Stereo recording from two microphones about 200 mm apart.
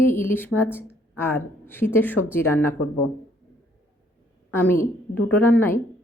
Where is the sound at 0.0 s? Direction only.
10° left (ahead or behind).